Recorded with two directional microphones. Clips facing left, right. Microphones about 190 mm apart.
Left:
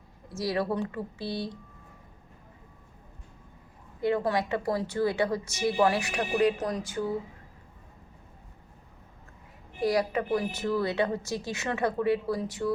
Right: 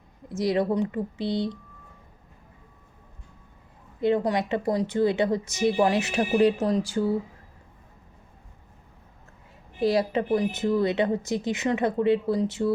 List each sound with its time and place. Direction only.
0.3 s a woman's voice: 20° right (ahead or behind)
4.0 s a woman's voice: 20° right (ahead or behind)
9.8 s a woman's voice: 25° right (ahead or behind)